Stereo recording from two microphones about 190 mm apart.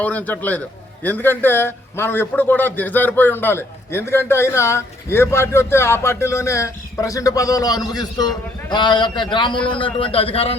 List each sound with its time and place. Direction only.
0.0 s a man's voice: 10° left (ahead or behind); by 10.5 s 30° left (ahead or behind)